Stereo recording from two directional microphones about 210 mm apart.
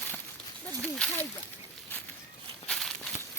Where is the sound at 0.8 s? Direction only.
5° left (ahead or behind).